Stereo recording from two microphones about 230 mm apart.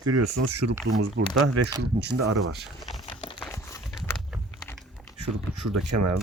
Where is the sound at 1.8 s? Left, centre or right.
Right.